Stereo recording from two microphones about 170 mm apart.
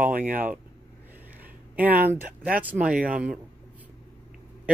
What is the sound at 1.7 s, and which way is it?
Speech, 10° right (ahead or behind).